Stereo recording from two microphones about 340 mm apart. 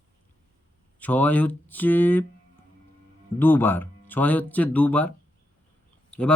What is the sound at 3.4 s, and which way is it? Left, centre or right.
Speech, centre.